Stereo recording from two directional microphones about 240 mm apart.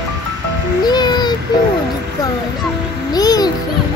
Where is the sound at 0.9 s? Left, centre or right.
Centre.